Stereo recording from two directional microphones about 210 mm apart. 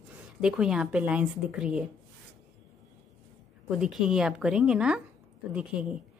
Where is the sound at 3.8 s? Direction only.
5° right (ahead or behind).